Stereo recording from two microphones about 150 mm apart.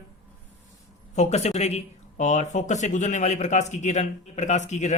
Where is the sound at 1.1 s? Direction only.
50° left (ahead or behind).